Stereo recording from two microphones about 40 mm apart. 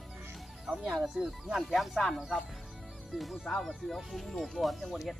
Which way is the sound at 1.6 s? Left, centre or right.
Centre.